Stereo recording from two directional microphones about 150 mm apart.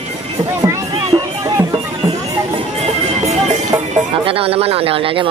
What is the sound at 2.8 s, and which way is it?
Music, 50° right (ahead or behind).